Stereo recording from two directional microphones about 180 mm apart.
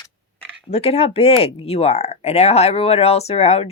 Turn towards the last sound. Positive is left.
turn(degrees=35)  # may be behind; listen again after turning